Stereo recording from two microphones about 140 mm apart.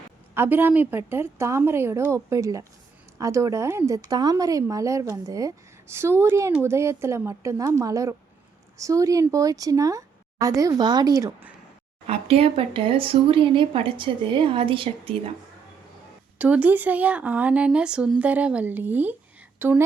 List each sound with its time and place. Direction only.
0.3 s speech: 15° right (ahead or behind)
12.0 s speech: 45° right (ahead or behind)
16.4 s a woman's voice: 10° right (ahead or behind)